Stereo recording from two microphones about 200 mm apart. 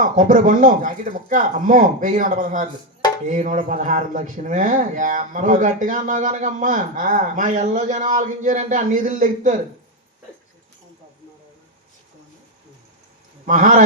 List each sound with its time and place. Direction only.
0.0 s speech: 40° right (ahead or behind)
13.4 s a man's voice: 40° right (ahead or behind)